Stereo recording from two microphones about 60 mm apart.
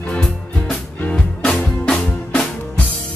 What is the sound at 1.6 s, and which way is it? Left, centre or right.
Music, centre.